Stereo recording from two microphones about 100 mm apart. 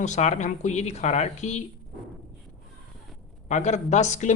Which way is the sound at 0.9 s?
90° left.